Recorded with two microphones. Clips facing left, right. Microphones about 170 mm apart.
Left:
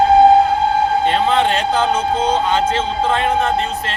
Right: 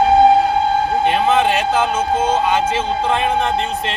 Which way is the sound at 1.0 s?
10° right (ahead or behind).